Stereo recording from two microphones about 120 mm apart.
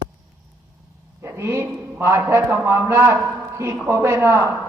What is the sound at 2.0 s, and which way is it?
A man's voice, 20° right (ahead or behind).